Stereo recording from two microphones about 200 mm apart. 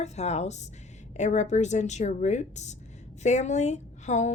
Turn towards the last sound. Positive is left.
turn(degrees=35)  # may be behind; listen again after turning